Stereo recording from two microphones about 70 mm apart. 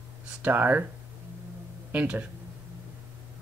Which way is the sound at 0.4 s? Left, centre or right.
Right.